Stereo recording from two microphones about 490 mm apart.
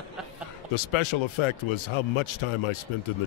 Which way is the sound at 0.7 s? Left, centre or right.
Left.